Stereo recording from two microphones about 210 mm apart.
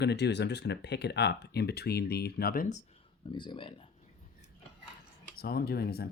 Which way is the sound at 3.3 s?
20° left (ahead or behind).